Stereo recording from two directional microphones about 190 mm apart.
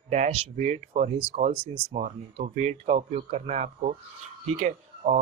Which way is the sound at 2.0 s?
40° right (ahead or behind).